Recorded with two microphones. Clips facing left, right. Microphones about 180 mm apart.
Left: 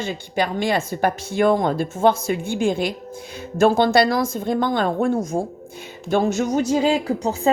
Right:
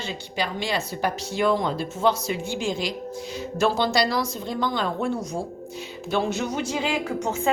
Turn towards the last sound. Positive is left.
turn(degrees=35)  # may be behind; listen again after turning